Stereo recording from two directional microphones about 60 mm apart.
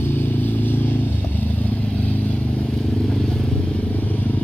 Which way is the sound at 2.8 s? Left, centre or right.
Centre.